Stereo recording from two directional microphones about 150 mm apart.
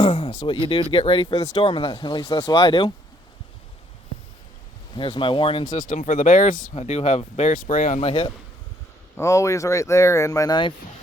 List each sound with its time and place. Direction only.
0.0 s a sound: 35° left (ahead or behind)
0.3 s speech: 35° left (ahead or behind)
4.9 s speech: 30° left (ahead or behind)
5.8 s speech: 65° left (ahead or behind)
6.7 s speech: 45° left (ahead or behind)
7.5 s speech: 65° left (ahead or behind)
8.0 s speech: 40° left (ahead or behind)
9.1 s speech: 20° left (ahead or behind)